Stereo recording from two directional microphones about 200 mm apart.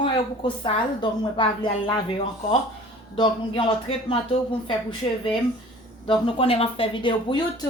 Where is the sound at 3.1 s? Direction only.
25° left (ahead or behind).